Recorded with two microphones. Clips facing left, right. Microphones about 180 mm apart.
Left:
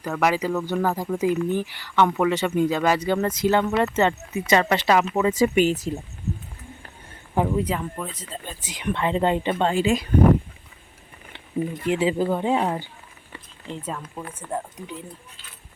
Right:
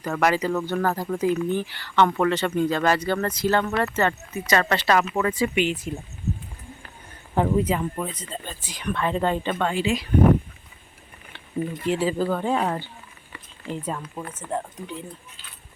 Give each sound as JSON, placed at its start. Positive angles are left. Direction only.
{"t": 0.1, "sound": "speech", "side_deg": 5}
{"t": 5.3, "sound": "speech", "side_deg": 40}
{"t": 7.3, "sound": "speech", "side_deg": 0}
{"t": 8.6, "sound": "speech", "side_deg": 20}
{"t": 9.7, "sound": "speech", "side_deg": 45}
{"t": 11.9, "sound": "speech", "side_deg": 20}
{"t": 13.7, "sound": "speech", "side_deg": -5}
{"t": 14.5, "sound": "speech", "side_deg": 10}